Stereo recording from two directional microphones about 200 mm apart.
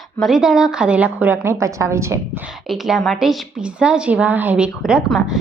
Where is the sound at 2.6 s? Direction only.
Centre (ahead or behind).